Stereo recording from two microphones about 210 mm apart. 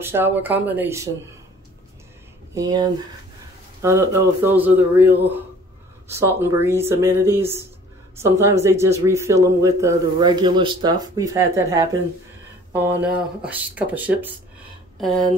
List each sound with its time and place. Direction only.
0.0 s speech: 10° right (ahead or behind)
2.5 s speech: 20° right (ahead or behind); by 15.3 s centre (ahead or behind)